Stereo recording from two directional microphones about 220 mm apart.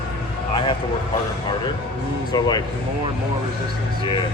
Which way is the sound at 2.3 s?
20° left (ahead or behind).